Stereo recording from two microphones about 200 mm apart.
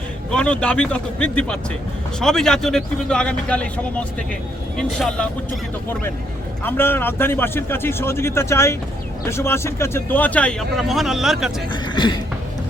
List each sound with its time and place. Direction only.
0.3 s speech: 5° left (ahead or behind)
6.7 s speech: 10° left (ahead or behind)
11.9 s a sound: 25° left (ahead or behind)